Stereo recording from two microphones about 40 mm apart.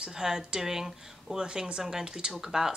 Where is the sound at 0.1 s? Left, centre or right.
Centre.